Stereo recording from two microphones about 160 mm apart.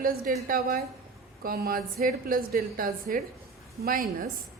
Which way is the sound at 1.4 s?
65° right (ahead or behind).